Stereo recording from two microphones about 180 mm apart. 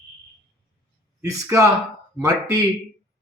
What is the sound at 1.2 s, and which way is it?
A man's voice, 15° right (ahead or behind).